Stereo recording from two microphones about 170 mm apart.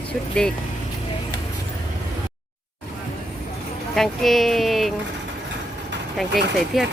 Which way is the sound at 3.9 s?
Centre (ahead or behind).